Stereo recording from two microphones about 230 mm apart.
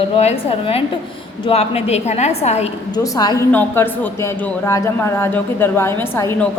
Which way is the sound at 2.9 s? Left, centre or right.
Centre.